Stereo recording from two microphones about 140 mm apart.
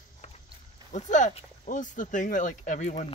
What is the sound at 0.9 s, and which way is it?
Speech, 60° left (ahead or behind).